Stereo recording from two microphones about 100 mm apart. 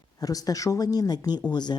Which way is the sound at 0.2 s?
40° left (ahead or behind).